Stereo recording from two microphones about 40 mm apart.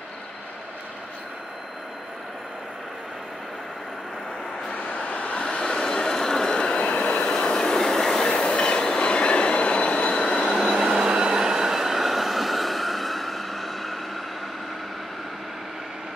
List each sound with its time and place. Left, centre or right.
4.7 s vehicle: left
6.8 s vehicle: left
7.3 s train: centre
10.5 s train: centre
10.8 s train: centre
11.1 s train: centre